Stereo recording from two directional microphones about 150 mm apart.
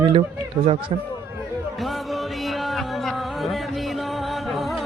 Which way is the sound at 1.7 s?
Centre (ahead or behind).